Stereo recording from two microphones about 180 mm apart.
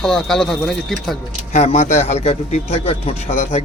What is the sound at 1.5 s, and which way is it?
A man's voice, 40° left (ahead or behind).